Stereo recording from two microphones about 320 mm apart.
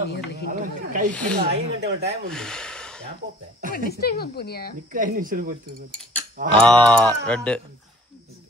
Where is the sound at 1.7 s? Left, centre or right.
Right.